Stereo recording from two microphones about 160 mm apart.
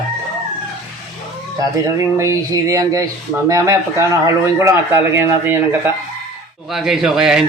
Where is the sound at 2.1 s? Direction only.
20° right (ahead or behind).